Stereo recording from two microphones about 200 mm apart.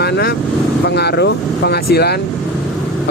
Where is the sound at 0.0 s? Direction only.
50° left (ahead or behind).